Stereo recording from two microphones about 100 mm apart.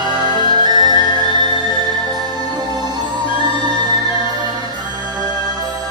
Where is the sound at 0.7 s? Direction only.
45° right (ahead or behind).